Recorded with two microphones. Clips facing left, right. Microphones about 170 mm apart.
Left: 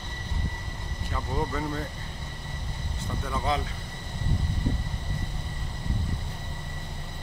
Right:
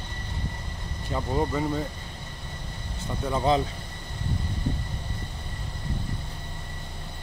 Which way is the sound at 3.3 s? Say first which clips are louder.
Right 6 dB; 25° right (ahead or behind).